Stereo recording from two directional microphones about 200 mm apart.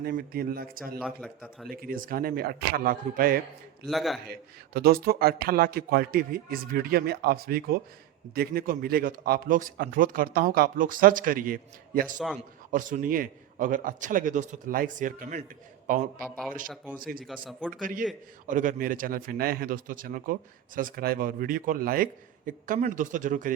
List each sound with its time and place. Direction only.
0.0 s speech: 50° right (ahead or behind)
1.0 s a man's voice: centre (ahead or behind)
1.7 s speech: 45° right (ahead or behind)
3.8 s a man's voice: centre (ahead or behind)
4.3 s a man's voice: 50° right (ahead or behind)
17.2 s a man's voice: 5° right (ahead or behind)
17.7 s a man's voice: 40° right (ahead or behind)